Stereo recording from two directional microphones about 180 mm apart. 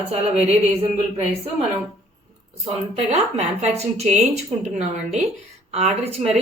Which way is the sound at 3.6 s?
35° right (ahead or behind).